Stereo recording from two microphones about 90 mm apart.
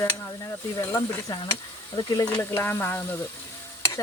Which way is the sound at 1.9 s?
50° left (ahead or behind).